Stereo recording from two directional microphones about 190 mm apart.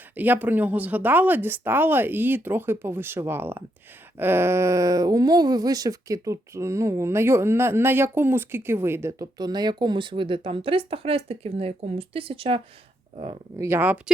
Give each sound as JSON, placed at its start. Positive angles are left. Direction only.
{"t": 0.2, "sound": "speech", "side_deg": -10}
{"t": 13.6, "sound": "speech", "side_deg": -10}